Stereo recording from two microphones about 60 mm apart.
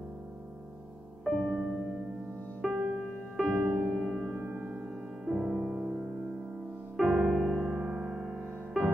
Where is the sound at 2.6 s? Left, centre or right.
Centre.